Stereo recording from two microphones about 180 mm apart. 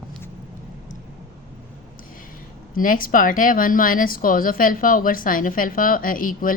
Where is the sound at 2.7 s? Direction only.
50° left (ahead or behind).